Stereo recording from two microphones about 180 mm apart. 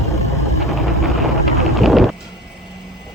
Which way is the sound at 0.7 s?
Centre (ahead or behind).